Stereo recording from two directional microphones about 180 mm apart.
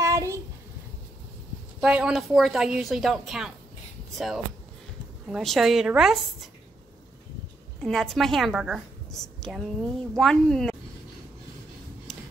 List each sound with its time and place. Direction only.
0.0 s a sound: 15° right (ahead or behind)
1.8 s a woman's voice: 5° right (ahead or behind)
5.3 s a woman's voice: centre (ahead or behind)
7.8 s a woman's voice: centre (ahead or behind)